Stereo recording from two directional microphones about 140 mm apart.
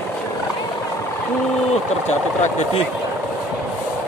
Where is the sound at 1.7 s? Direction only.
50° left (ahead or behind).